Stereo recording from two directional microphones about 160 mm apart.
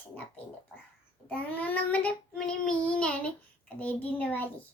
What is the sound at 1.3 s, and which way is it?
Child singing, 10° left (ahead or behind).